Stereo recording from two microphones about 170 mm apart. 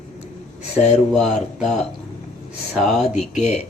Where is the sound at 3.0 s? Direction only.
45° left (ahead or behind).